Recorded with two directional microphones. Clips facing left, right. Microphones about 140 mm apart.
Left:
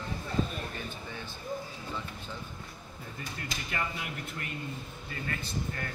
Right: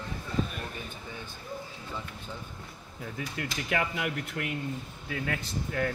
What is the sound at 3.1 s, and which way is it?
Speech, 80° right.